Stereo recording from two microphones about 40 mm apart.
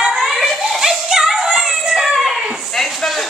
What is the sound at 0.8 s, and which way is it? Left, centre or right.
Music, centre.